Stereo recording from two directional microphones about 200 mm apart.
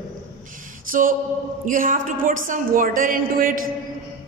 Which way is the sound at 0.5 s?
40° right (ahead or behind).